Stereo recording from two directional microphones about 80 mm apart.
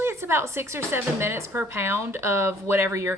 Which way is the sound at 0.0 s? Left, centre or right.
Right.